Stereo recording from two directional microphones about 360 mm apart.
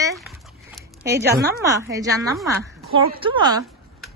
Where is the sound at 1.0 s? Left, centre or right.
Right.